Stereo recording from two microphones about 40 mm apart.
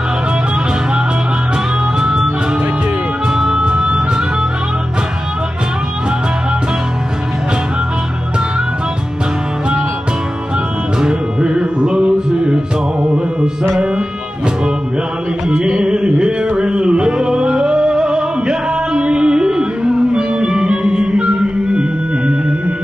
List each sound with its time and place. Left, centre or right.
3.3 s music: centre
11.0 s music: right
15.8 s music: right